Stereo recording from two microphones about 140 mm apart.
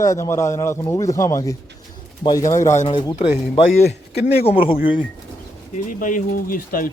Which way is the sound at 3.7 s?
60° left (ahead or behind).